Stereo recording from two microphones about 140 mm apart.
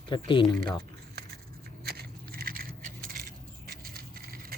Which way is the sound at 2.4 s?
90° right.